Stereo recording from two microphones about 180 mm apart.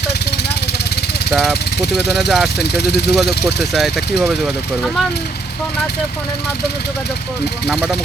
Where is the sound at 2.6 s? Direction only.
65° left (ahead or behind).